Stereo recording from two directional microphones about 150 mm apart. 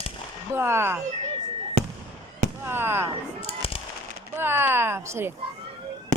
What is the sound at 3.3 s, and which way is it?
Fireworks, 40° left (ahead or behind).